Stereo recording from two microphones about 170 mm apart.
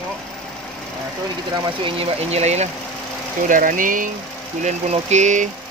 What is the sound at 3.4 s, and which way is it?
Speech, 50° right (ahead or behind).